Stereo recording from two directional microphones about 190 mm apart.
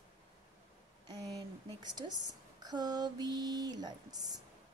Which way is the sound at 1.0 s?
20° right (ahead or behind).